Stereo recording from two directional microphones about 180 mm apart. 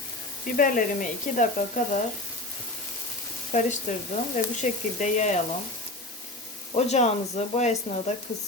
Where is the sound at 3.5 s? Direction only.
40° left (ahead or behind).